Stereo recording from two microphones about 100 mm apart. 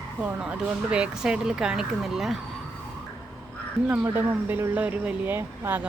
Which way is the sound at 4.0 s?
20° right (ahead or behind).